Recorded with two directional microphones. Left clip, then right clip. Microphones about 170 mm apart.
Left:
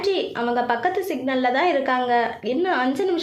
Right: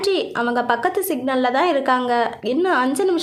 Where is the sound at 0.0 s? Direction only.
30° right (ahead or behind).